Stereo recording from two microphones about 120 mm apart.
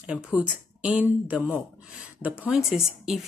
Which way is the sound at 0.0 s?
10° right (ahead or behind).